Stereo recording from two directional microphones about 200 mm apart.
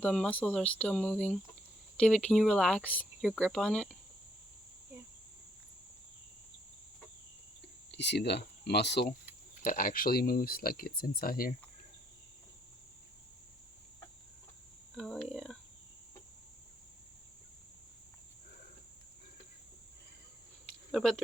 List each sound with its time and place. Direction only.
0.0 s speech: 5° left (ahead or behind)
7.9 s speech: 60° left (ahead or behind)
9.6 s speech: 45° left (ahead or behind)
14.9 s a sound: centre (ahead or behind)
20.9 s speech: centre (ahead or behind)